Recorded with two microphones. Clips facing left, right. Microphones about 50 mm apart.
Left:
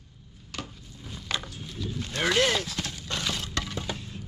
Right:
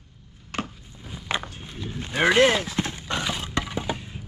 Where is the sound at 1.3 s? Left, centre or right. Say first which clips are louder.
Right 4 dB; right.